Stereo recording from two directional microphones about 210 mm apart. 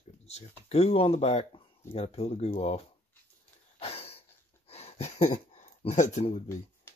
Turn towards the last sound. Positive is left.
turn(degrees=30)  # may be behind; listen again after turning